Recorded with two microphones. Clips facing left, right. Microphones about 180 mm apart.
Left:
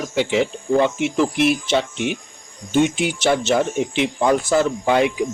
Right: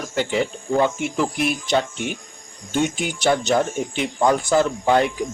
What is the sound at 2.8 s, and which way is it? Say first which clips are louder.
Speech: left 4 dB; 45° right (ahead or behind).